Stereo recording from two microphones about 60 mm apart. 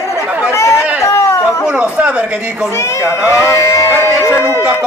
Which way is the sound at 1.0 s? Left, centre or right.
Left.